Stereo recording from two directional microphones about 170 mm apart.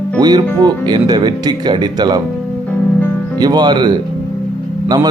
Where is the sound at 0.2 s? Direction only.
25° right (ahead or behind).